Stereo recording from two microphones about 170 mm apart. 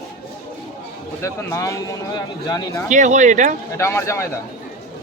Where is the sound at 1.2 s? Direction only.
20° left (ahead or behind).